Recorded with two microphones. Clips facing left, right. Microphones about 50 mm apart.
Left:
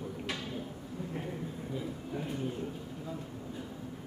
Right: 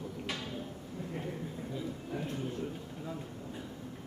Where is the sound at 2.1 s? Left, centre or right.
Centre.